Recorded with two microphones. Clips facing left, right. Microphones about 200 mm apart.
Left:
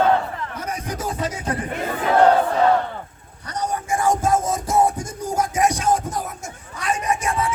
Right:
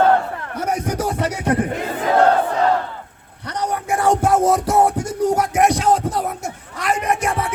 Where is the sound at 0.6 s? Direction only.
70° right (ahead or behind).